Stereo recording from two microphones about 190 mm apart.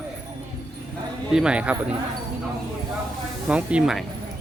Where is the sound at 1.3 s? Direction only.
5° right (ahead or behind).